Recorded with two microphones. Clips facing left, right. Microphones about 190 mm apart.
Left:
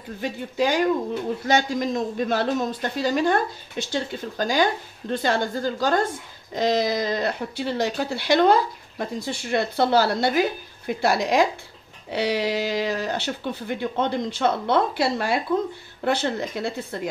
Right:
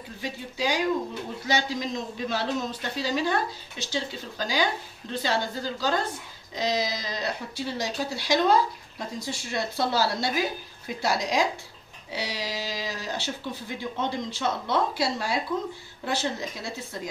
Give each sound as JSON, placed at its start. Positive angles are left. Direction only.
{"t": 0.2, "sound": "a man's voice", "side_deg": 50}